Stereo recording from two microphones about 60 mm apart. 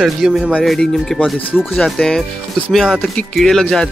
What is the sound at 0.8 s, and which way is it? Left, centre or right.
Speech, centre.